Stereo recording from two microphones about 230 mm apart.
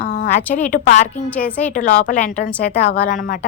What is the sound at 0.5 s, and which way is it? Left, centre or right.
Speech, left.